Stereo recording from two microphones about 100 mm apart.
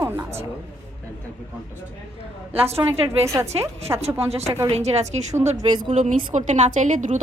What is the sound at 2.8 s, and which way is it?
A woman's voice, 25° right (ahead or behind).